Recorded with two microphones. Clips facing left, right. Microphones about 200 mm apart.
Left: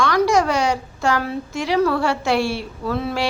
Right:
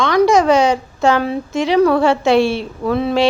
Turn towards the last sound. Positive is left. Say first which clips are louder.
# right 7 dB
turn(degrees=-20)  # may be behind; listen again after turning